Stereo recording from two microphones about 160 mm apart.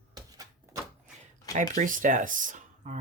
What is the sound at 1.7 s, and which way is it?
Speech, 55° right (ahead or behind).